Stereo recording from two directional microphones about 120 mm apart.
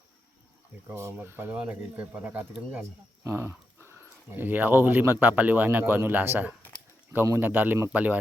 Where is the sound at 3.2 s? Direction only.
20° right (ahead or behind).